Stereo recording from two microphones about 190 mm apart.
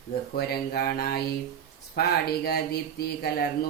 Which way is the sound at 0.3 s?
55° left (ahead or behind).